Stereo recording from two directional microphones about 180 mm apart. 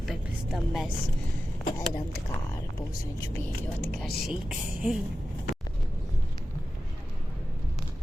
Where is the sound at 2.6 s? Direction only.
15° left (ahead or behind).